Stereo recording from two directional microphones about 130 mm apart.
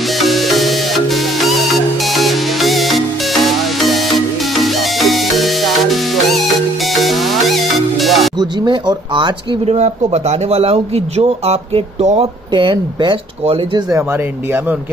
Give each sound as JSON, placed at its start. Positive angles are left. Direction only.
{"t": 0.2, "sound": "music", "side_deg": 0}
{"t": 8.4, "sound": "speech", "side_deg": -30}
{"t": 10.1, "sound": "speech", "side_deg": -55}
{"t": 12.5, "sound": "speech", "side_deg": -40}